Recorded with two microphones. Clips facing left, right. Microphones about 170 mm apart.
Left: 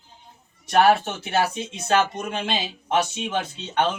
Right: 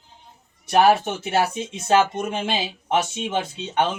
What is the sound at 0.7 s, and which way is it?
Speech, 15° right (ahead or behind).